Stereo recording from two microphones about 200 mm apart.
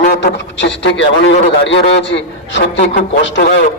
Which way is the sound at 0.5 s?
65° left (ahead or behind).